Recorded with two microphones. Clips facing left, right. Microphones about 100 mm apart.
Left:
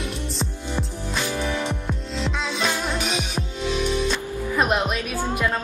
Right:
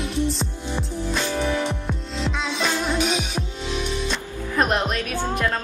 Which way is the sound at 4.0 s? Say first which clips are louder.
Left 3 dB; 5° left (ahead or behind).